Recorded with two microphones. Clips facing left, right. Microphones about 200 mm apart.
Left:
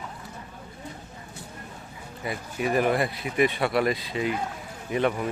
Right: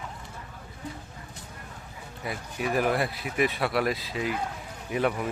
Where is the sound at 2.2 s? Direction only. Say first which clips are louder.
Left 3 dB; centre (ahead or behind).